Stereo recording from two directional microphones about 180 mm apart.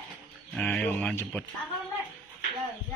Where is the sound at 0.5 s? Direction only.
5° left (ahead or behind).